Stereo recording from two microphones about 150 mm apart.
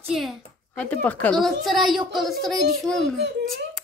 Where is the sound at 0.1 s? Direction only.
Centre (ahead or behind).